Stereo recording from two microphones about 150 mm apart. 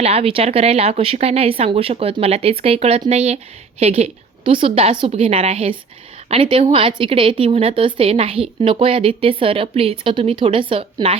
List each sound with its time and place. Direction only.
0.0 s a woman's voice: 40° right (ahead or behind)